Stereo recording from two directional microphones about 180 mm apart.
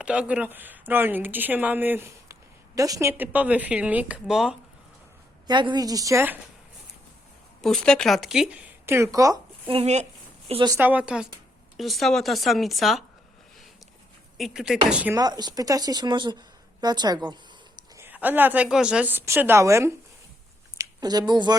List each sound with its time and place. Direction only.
0.0 s speech: 5° right (ahead or behind)
5.5 s speech: 25° right (ahead or behind)
7.6 s speech: centre (ahead or behind); by 9.4 s 20° right (ahead or behind)
9.6 s speech: 35° right (ahead or behind)
10.5 s speech: 25° right (ahead or behind)
10.8 s speech: 10° right (ahead or behind)
14.3 s speech: centre (ahead or behind)
15.1 s a woman's voice: 20° right (ahead or behind)